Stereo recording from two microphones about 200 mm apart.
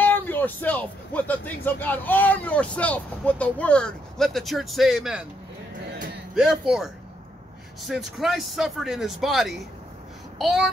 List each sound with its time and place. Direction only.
0.0 s speech: 10° left (ahead or behind)
6.3 s speech: centre (ahead or behind)